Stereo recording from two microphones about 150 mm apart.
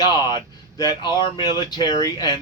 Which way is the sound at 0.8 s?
30° left (ahead or behind).